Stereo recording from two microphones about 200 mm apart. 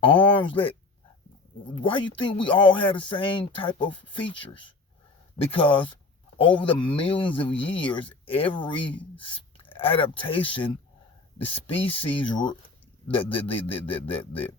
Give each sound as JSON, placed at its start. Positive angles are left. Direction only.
{"t": 0.0, "sound": "speech", "side_deg": 25}
{"t": 1.7, "sound": "speech", "side_deg": 25}